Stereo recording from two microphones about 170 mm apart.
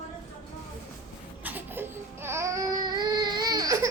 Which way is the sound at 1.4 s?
10° right (ahead or behind).